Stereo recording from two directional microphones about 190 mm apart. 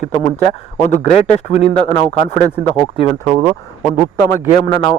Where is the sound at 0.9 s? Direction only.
35° left (ahead or behind).